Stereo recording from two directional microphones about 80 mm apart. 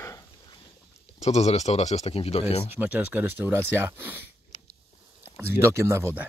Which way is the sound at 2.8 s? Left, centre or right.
Right.